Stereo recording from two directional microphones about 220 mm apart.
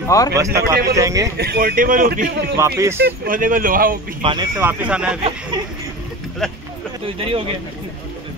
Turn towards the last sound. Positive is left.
turn(degrees=-25)  # may be behind; listen again after turning